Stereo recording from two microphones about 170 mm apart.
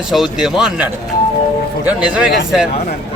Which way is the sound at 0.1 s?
Centre (ahead or behind).